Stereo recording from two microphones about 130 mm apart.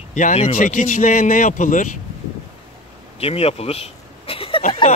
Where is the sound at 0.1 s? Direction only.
70° left (ahead or behind).